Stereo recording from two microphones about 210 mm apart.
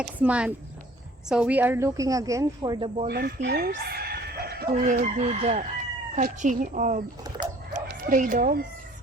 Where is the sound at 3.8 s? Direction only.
50° right (ahead or behind).